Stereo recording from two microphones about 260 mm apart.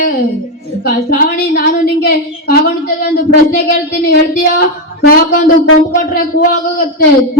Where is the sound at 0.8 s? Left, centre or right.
Left.